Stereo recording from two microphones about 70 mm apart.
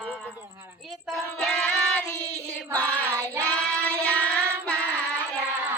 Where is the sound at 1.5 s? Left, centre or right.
Centre.